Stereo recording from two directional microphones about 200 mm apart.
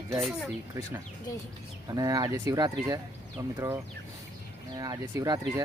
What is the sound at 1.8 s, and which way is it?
Speech, 20° right (ahead or behind).